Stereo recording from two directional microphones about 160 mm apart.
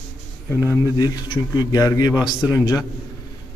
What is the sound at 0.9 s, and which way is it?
A man's voice, 25° left (ahead or behind).